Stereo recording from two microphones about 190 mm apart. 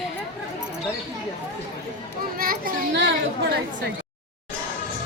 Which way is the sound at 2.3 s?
50° right (ahead or behind).